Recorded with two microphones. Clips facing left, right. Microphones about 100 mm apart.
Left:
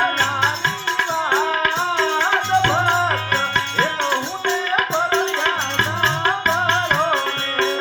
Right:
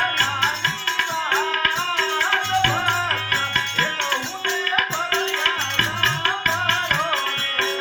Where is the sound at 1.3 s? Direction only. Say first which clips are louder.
Left 3 dB; 20° left (ahead or behind).